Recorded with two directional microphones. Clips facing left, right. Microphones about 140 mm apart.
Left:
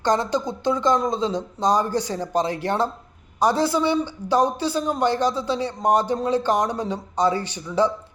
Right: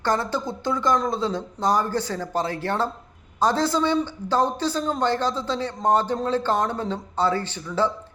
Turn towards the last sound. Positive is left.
turn(degrees=15)  # may be behind; listen again after turning